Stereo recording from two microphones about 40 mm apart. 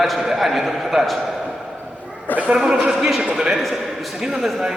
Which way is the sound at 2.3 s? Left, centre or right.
Left.